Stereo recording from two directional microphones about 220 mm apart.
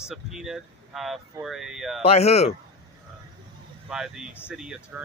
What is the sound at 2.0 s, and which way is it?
Speech, 30° left (ahead or behind).